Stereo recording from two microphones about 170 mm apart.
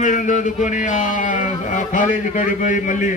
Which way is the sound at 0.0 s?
50° left (ahead or behind).